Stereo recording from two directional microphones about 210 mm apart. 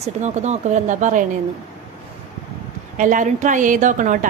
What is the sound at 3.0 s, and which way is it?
A woman's voice, 40° right (ahead or behind).